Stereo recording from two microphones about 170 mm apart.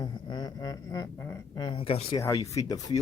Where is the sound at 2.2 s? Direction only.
20° left (ahead or behind).